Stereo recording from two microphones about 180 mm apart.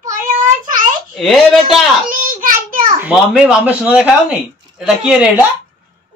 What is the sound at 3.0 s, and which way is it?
Speech, 5° right (ahead or behind).